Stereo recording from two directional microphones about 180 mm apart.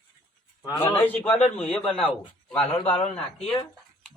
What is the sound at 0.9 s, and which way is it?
A man's voice, 10° left (ahead or behind).